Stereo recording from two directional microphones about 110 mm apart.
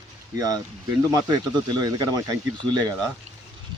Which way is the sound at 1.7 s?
35° right (ahead or behind).